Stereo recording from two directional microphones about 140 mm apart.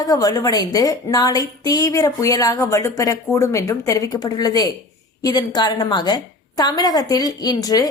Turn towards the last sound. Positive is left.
turn(degrees=25)  # may be behind; listen again after turning